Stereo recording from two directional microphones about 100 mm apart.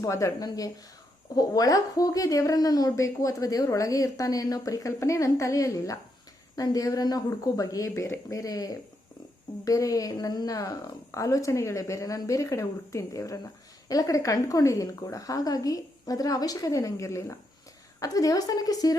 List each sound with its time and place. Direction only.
0.0 s a woman's voice: 30° left (ahead or behind)